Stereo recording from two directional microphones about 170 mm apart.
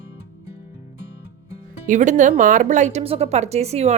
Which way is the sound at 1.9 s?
45° right (ahead or behind).